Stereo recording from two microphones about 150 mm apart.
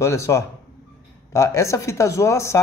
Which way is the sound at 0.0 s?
20° left (ahead or behind).